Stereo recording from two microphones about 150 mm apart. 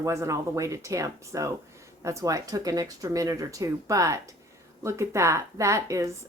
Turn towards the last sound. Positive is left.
turn(degrees=-20)  # may be behind; listen again after turning